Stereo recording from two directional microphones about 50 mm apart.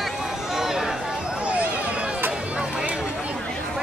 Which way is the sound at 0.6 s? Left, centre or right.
Centre.